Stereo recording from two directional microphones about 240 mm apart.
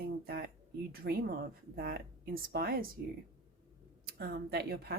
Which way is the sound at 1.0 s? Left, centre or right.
Right.